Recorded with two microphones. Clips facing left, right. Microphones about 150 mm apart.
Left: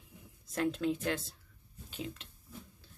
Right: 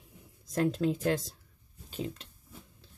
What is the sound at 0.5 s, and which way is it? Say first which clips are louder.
Speech: right 4 dB; 40° right (ahead or behind).